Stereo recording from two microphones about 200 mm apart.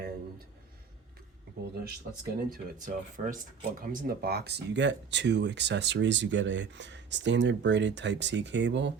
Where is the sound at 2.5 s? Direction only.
40° right (ahead or behind).